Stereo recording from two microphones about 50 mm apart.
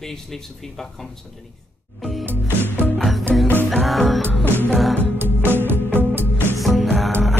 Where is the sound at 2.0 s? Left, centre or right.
Centre.